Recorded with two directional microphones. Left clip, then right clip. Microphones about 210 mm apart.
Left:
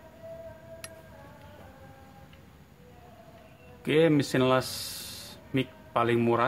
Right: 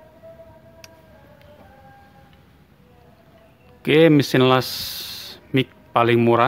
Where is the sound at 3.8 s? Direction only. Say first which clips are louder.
Right 9 dB; 45° right (ahead or behind).